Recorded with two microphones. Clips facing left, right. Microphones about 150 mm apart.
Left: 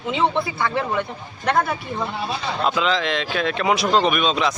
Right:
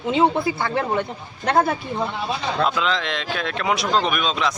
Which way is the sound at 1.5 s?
30° right (ahead or behind).